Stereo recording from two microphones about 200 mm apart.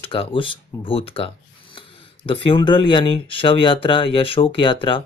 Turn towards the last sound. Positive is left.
turn(degrees=25)  # may be behind; listen again after turning